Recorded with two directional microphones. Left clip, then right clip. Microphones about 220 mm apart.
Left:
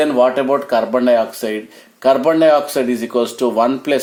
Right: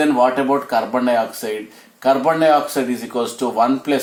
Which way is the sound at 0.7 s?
50° left (ahead or behind).